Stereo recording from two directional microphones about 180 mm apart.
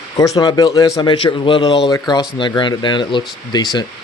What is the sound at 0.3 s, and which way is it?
Speech, 20° left (ahead or behind).